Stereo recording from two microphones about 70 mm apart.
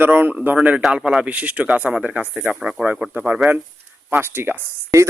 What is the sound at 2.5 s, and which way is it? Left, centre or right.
Speech, centre.